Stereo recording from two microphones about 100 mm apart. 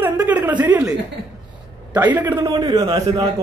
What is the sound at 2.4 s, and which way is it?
Speech, 40° right (ahead or behind).